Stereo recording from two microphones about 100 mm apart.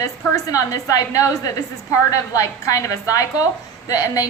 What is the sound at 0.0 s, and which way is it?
A woman's voice, 35° left (ahead or behind).